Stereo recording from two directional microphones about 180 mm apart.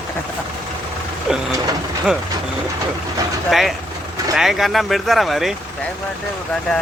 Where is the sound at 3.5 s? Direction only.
Centre (ahead or behind).